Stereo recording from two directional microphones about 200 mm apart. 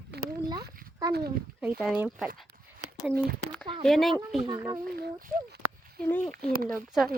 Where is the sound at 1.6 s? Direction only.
5° right (ahead or behind).